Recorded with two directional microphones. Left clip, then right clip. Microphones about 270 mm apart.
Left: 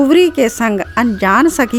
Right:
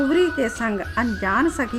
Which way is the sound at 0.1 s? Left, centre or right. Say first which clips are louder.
Left 9 dB; left.